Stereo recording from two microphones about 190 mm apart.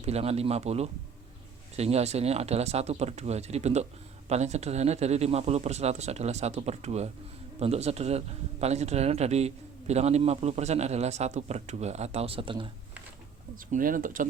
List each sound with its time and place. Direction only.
0.0 s a man's voice: 35° right (ahead or behind)
13.7 s speech: 45° right (ahead or behind)